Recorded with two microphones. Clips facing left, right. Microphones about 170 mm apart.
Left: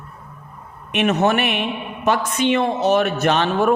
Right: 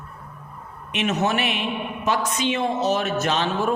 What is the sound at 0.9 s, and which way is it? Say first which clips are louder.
A man's voice: left 5 dB; 60° left (ahead or behind).